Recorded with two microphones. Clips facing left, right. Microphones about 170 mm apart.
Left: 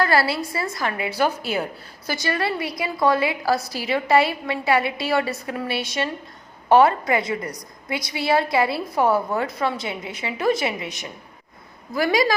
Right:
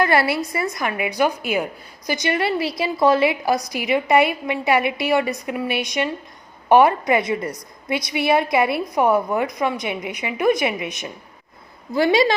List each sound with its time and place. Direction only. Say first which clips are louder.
0.0 s a woman's voice: right 2 dB; 20° right (ahead or behind)